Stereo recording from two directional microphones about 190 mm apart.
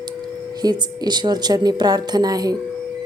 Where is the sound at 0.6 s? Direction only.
20° right (ahead or behind).